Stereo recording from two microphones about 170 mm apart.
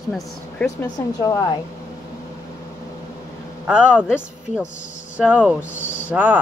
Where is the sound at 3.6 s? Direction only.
5° right (ahead or behind).